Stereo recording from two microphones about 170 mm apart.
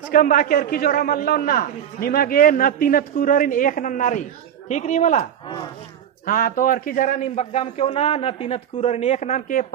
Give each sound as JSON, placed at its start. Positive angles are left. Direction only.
{"t": 0.1, "sound": "a man's voice", "side_deg": 55}
{"t": 6.2, "sound": "a man's voice", "side_deg": 55}